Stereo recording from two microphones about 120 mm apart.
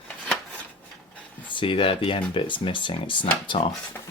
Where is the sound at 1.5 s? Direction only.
45° left (ahead or behind).